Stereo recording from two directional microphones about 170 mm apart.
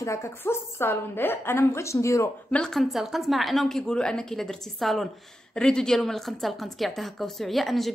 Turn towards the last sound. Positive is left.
turn(degrees=0)  # may be behind; listen again after turning